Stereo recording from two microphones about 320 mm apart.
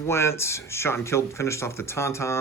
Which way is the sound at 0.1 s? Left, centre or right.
Centre.